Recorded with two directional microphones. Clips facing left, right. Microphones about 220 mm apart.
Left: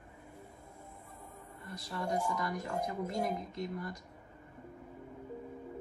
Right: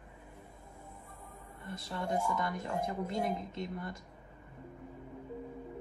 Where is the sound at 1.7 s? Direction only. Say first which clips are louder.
Right 1 dB; 25° right (ahead or behind).